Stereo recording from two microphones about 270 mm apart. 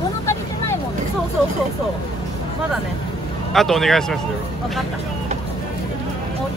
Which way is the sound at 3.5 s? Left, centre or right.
Centre.